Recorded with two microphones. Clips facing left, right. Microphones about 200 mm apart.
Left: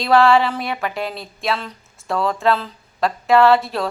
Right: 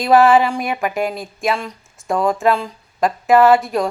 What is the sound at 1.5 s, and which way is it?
Speech, 10° right (ahead or behind).